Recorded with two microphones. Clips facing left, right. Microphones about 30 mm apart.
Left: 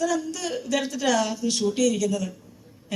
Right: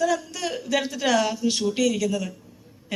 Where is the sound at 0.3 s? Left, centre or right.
Centre.